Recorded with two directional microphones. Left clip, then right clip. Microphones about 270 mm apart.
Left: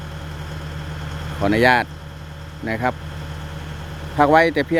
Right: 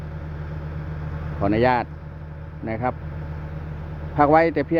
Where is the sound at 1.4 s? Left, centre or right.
Centre.